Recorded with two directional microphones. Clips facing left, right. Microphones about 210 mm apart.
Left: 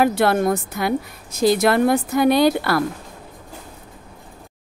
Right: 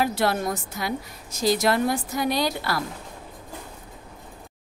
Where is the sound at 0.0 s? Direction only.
55° left (ahead or behind).